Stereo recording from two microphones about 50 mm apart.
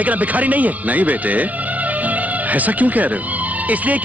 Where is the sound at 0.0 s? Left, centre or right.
Right.